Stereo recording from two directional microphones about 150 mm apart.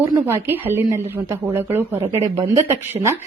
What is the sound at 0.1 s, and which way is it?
A woman's voice, 15° right (ahead or behind).